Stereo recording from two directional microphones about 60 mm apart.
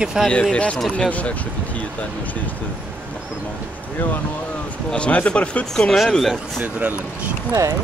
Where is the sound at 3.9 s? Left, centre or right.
Left.